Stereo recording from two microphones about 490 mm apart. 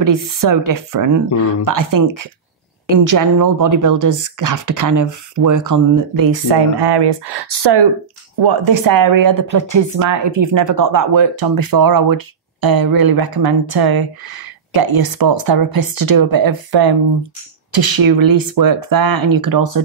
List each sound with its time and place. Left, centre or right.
0.0 s speech: right